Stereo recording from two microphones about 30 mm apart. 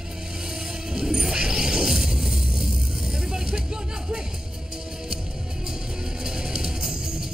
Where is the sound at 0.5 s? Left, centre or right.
Right.